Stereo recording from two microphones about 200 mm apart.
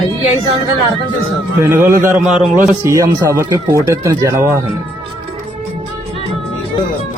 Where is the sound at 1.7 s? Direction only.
15° right (ahead or behind).